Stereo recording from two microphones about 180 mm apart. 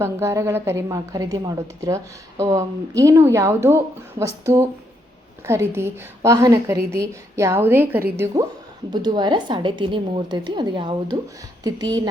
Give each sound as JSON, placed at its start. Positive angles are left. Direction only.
{"t": 0.0, "sound": "a woman's voice", "side_deg": -15}
{"t": 8.9, "sound": "a woman's voice", "side_deg": -25}